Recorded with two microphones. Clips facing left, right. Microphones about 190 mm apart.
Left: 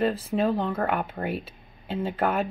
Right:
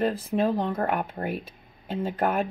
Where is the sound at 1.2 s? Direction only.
45° right (ahead or behind).